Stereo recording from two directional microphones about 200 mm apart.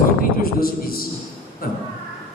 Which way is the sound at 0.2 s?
45° left (ahead or behind).